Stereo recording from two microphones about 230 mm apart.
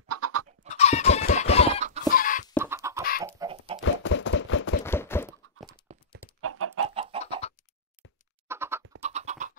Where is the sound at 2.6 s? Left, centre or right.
Centre.